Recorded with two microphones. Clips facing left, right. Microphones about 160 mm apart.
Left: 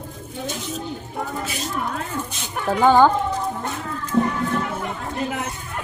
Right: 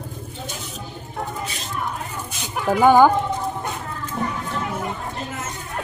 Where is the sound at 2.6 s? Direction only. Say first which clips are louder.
Right 1 dB; 10° right (ahead or behind).